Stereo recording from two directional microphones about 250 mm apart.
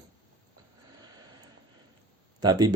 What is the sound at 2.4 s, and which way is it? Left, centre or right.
Speech, centre.